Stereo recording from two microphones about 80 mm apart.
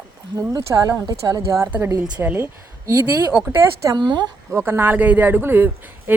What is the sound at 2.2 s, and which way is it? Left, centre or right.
Speech, right.